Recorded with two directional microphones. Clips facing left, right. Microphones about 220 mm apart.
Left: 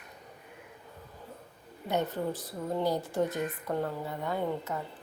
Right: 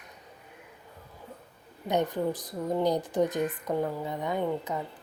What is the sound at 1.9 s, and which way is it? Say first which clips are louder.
A woman's voice: right 3 dB; 15° right (ahead or behind).